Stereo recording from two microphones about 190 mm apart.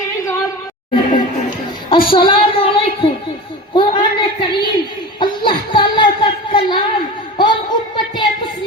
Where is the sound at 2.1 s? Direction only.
25° left (ahead or behind).